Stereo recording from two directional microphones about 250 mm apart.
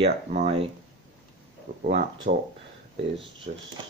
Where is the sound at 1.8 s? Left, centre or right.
Right.